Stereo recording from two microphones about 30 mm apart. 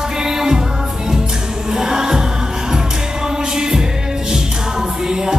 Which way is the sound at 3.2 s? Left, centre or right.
Right.